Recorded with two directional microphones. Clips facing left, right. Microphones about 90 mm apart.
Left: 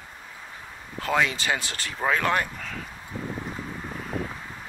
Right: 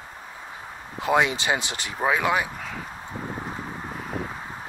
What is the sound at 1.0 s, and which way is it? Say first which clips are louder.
Speech: right 3 dB; 20° right (ahead or behind).